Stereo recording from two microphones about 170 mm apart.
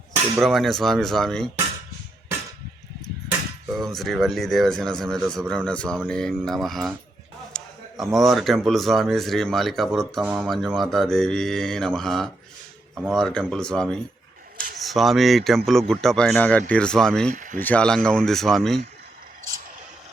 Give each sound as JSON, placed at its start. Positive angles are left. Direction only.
{"t": 0.3, "sound": "a man's voice", "side_deg": 0}
{"t": 3.8, "sound": "a man's voice", "side_deg": 0}
{"t": 17.3, "sound": "speech", "side_deg": -50}
{"t": 17.6, "sound": "a man's voice", "side_deg": 10}